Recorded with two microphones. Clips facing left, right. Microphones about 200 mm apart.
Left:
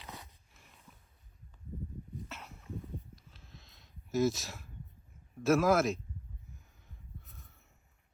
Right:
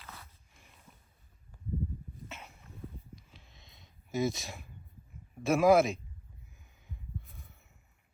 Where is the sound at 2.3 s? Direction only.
Centre (ahead or behind).